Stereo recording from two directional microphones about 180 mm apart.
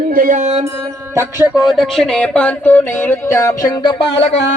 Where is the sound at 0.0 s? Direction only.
50° right (ahead or behind).